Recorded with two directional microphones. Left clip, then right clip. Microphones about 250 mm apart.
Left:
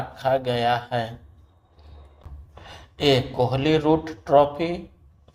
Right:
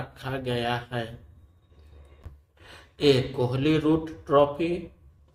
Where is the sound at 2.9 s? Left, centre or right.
Left.